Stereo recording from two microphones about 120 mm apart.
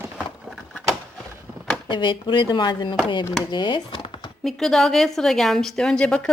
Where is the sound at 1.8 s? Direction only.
40° left (ahead or behind).